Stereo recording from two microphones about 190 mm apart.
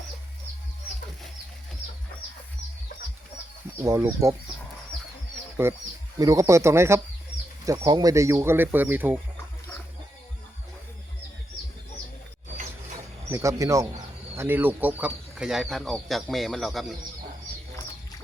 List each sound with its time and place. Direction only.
3.8 s speech: 15° right (ahead or behind)
6.1 s speech: 15° right (ahead or behind)
13.3 s speech: 15° right (ahead or behind); by 16.8 s centre (ahead or behind)